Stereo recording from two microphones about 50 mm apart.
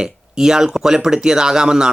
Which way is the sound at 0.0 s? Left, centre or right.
Centre.